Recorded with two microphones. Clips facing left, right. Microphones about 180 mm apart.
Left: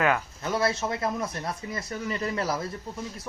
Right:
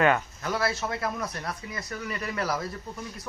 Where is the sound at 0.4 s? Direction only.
25° left (ahead or behind).